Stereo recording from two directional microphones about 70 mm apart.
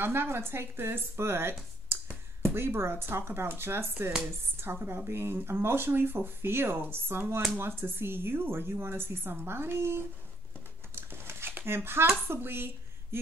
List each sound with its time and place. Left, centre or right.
0.0 s speech: right
2.5 s speech: right
11.0 s a sound: right
12.3 s a woman's voice: right